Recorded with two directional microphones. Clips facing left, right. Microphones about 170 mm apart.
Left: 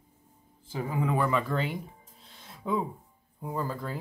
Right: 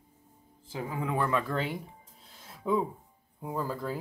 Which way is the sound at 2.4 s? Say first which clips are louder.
Right 2 dB; 5° right (ahead or behind).